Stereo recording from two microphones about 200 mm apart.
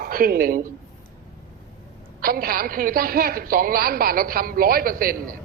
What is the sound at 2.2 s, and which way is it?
A man's voice, 45° right (ahead or behind).